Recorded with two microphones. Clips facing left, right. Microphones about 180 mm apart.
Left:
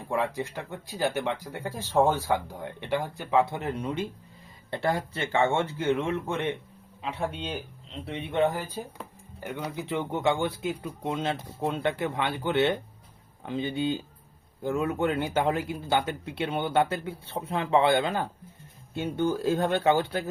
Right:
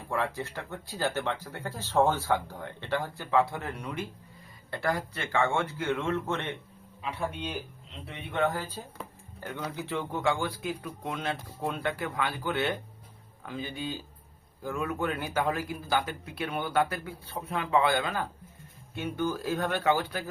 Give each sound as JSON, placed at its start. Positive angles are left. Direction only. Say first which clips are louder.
{"t": 0.1, "sound": "speech", "louder": "left 3 dB", "side_deg": 15}
{"t": 8.0, "sound": "speech", "louder": "left 4 dB", "side_deg": 25}